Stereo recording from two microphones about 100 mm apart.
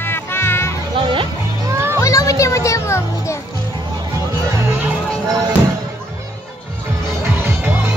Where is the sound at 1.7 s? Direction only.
25° right (ahead or behind).